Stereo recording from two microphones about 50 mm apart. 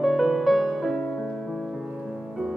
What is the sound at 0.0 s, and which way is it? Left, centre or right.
Music, centre.